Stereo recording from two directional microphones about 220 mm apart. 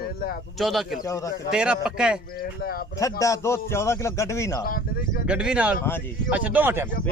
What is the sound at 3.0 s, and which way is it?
A man's voice, 15° left (ahead or behind).